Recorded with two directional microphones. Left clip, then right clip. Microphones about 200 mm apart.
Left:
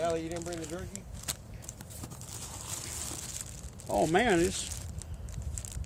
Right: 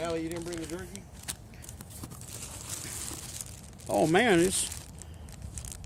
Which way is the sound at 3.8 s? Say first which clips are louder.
Right 2 dB; 50° right (ahead or behind).